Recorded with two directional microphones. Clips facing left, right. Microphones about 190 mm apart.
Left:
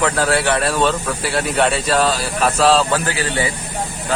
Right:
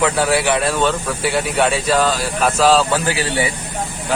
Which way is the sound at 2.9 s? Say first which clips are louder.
Right 1 dB; 15° right (ahead or behind).